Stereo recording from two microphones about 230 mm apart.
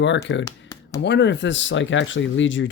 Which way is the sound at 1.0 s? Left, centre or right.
Left.